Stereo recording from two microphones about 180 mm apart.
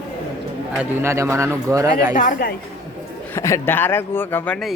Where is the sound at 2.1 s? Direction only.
50° left (ahead or behind).